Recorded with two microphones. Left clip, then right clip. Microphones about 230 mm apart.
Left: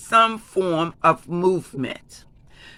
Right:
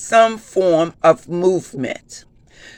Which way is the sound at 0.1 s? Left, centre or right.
Centre.